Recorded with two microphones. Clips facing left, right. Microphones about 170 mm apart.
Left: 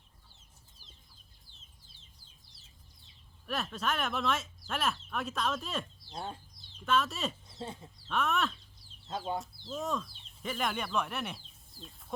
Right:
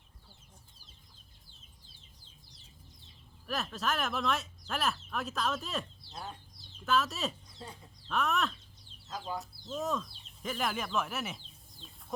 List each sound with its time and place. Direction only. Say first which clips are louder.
3.4 s speech: even; centre (ahead or behind)
6.8 s speech: even; centre (ahead or behind)
8.0 s a sound: even; centre (ahead or behind)
9.0 s speech: left 3 dB; 30° left (ahead or behind)
9.4 s speech: right 1 dB; centre (ahead or behind)